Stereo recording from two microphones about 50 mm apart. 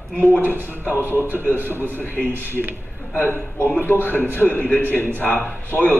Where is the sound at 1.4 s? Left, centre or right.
Left.